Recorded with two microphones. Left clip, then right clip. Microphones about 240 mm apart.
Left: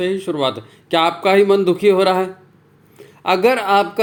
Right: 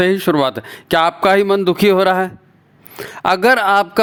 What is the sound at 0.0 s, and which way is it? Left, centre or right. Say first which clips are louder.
Speech: right 5 dB; right.